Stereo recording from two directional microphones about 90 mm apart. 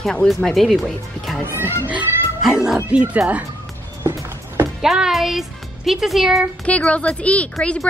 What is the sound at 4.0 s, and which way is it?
Music, 30° right (ahead or behind).